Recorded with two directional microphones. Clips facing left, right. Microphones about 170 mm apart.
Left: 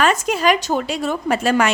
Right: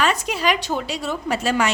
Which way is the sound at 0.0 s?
45° left (ahead or behind).